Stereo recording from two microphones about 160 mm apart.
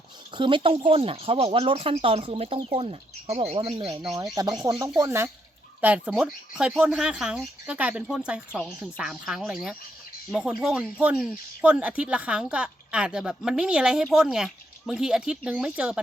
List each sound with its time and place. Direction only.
0.3 s speech: 30° right (ahead or behind)
4.4 s speech: 20° right (ahead or behind); by 16.0 s 5° right (ahead or behind)